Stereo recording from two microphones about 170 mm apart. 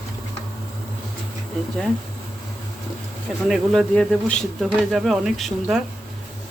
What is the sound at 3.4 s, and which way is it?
Speech, centre (ahead or behind).